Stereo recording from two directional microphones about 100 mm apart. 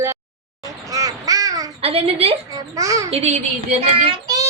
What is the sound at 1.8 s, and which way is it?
Speech, 80° right.